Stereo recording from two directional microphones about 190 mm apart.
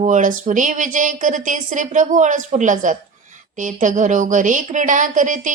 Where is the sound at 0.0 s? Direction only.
40° right (ahead or behind).